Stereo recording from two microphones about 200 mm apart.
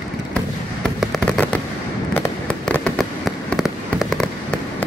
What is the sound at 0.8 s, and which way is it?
Fireworks, centre (ahead or behind).